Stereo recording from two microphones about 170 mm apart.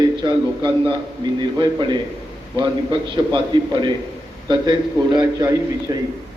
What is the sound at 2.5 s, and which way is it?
Speech, 30° right (ahead or behind).